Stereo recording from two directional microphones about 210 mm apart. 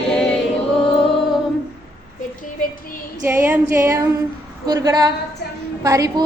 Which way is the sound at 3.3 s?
10° right (ahead or behind).